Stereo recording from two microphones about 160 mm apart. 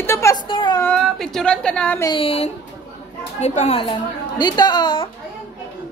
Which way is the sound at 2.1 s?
35° left (ahead or behind).